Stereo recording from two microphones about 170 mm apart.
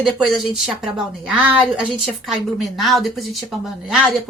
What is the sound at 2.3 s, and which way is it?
A woman's voice, centre (ahead or behind).